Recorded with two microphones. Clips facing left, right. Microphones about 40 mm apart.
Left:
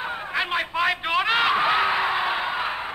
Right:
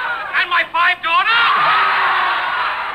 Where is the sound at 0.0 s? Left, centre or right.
Right.